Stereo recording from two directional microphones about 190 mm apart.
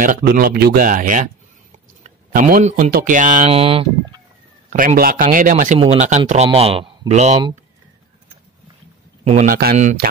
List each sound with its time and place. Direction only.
0.0 s speech: 45° right (ahead or behind)
2.3 s speech: 45° right (ahead or behind)
4.6 s speech: 45° right (ahead or behind)
9.2 s speech: 35° right (ahead or behind)
9.5 s speech: 55° right (ahead or behind)